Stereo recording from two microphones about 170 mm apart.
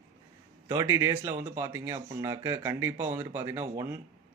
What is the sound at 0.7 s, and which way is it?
Speech, 15° right (ahead or behind).